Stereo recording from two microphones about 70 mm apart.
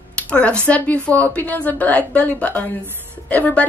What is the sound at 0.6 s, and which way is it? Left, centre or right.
A woman's voice, centre.